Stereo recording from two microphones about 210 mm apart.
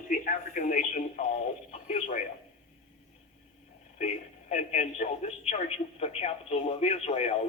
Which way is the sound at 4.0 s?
35° left (ahead or behind).